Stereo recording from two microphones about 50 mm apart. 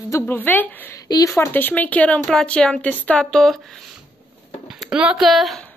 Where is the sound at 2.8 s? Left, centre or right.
Left.